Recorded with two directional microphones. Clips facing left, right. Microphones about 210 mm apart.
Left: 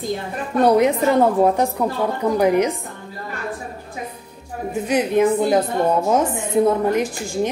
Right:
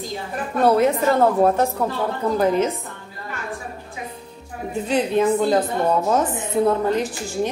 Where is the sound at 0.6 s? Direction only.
15° left (ahead or behind).